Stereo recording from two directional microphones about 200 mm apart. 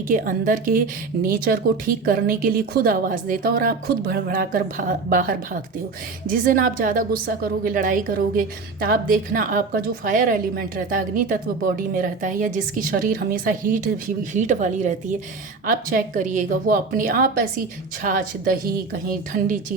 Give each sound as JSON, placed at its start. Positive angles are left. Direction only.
{"t": 0.1, "sound": "a woman's voice", "side_deg": -45}